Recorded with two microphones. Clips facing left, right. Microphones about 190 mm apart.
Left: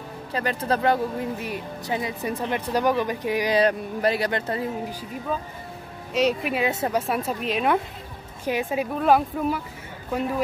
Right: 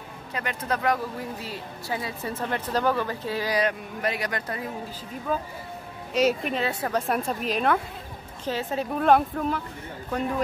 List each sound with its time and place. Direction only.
0.3 s speech: 35° left (ahead or behind)
1.5 s speech: 20° left (ahead or behind)
3.5 s speech: 35° left (ahead or behind)
5.3 s speech: 5° right (ahead or behind)
8.5 s speech: 15° left (ahead or behind)